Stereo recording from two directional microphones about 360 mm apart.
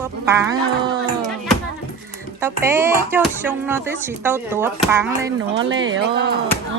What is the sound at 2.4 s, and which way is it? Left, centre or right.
Speech, centre.